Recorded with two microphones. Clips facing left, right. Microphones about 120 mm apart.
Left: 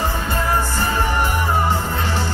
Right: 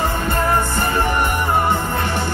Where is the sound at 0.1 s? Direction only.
55° right (ahead or behind).